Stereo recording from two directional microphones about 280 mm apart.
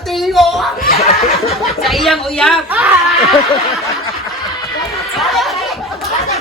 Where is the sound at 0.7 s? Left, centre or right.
Left.